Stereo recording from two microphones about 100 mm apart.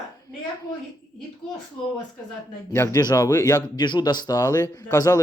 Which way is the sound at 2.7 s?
35° left (ahead or behind).